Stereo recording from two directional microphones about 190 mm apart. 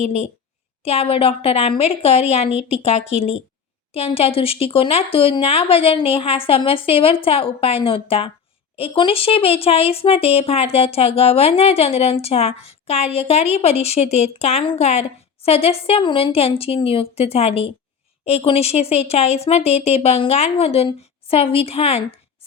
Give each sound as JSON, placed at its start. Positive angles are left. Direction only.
{"t": 0.0, "sound": "speech", "side_deg": 35}